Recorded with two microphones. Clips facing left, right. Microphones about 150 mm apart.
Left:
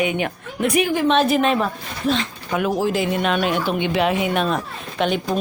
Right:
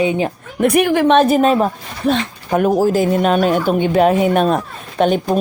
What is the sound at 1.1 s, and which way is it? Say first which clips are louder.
Speech: right 5 dB; 45° right (ahead or behind).